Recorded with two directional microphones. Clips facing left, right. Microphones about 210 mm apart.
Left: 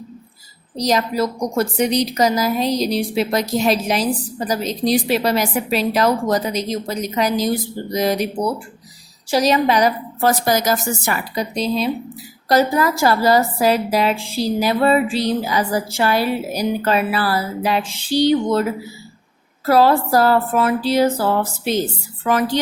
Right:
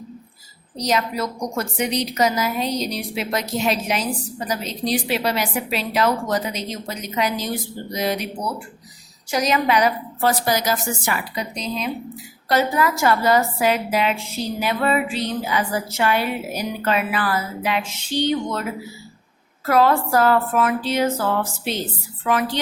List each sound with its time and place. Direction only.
0.8 s a woman's voice: 35° left (ahead or behind)
9.3 s a woman's voice: 35° left (ahead or behind)
19.6 s a woman's voice: 35° left (ahead or behind)